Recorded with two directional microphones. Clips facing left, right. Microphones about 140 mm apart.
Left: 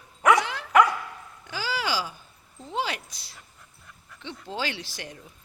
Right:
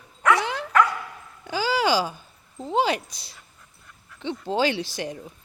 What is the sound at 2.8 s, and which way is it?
Speech, 20° right (ahead or behind).